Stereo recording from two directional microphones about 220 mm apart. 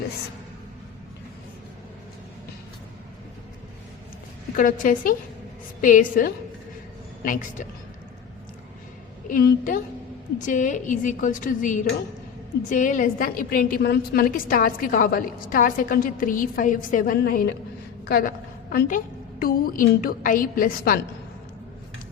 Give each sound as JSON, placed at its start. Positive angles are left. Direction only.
{"t": 4.5, "sound": "a woman's voice", "side_deg": 40}
{"t": 9.3, "sound": "a woman's voice", "side_deg": 40}